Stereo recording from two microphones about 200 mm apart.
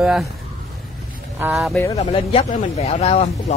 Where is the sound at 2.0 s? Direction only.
30° left (ahead or behind).